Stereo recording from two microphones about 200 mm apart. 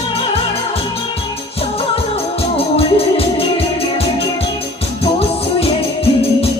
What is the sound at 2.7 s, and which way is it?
Music, 30° left (ahead or behind).